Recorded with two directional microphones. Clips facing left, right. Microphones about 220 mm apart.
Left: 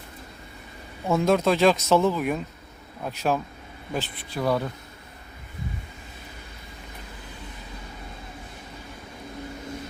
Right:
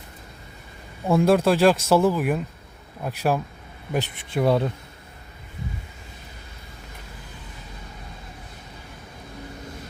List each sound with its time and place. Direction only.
1.0 s speech: 10° right (ahead or behind)
3.9 s speech: 25° right (ahead or behind)